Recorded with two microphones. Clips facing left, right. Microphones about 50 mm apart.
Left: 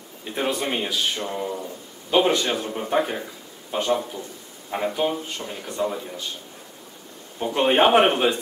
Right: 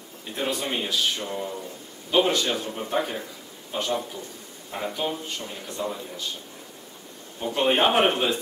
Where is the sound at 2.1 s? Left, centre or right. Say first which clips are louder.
Left 2 dB; centre.